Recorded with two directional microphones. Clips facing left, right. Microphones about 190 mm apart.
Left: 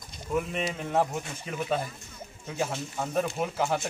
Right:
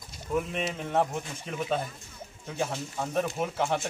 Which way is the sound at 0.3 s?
Centre (ahead or behind).